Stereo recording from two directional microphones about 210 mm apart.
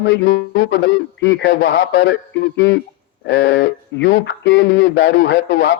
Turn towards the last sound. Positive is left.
turn(degrees=55)  # may be behind; listen again after turning